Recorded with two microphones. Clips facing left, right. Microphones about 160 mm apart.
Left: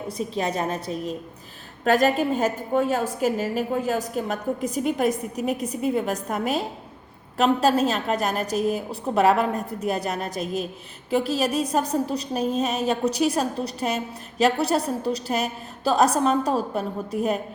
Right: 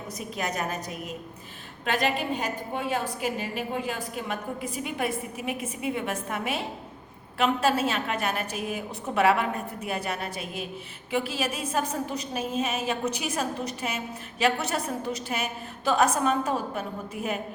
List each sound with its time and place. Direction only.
0.2 s a woman's voice: 30° left (ahead or behind)
1.8 s a woman's voice: 40° left (ahead or behind)